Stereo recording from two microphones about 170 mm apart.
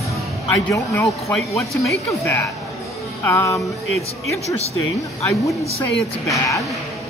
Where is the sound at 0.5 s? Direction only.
20° left (ahead or behind).